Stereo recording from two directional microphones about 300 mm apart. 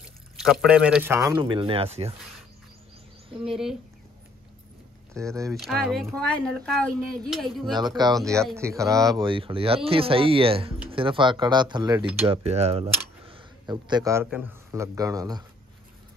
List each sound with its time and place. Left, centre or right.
0.4 s speech: centre
3.4 s speech: centre
5.1 s speech: centre